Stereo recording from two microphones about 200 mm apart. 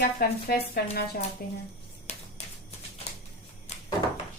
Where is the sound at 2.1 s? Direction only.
35° left (ahead or behind).